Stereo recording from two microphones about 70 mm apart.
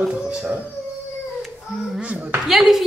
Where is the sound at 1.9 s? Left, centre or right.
Right.